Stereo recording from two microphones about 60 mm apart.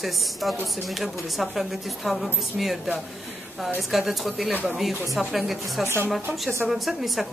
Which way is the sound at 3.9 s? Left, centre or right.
Centre.